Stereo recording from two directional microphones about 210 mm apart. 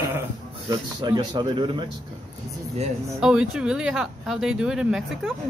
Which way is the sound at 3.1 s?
Centre (ahead or behind).